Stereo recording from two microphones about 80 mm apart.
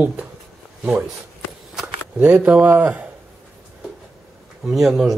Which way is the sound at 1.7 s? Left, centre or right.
Centre.